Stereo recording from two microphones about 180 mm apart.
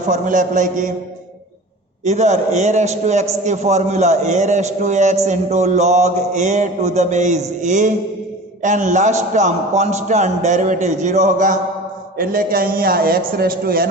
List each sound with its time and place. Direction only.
0.1 s a man's voice: 45° right (ahead or behind)
2.0 s a man's voice: 40° right (ahead or behind)